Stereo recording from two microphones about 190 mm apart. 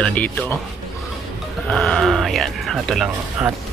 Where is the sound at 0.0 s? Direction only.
5° left (ahead or behind).